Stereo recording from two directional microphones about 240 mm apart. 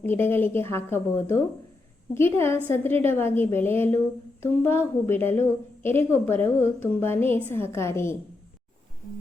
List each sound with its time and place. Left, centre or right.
0.0 s a woman's voice: centre